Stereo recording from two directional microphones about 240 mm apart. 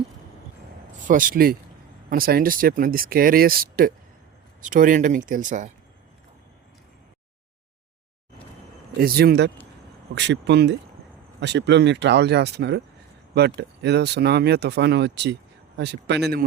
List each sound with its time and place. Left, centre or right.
1.0 s speech: right
9.0 s speech: right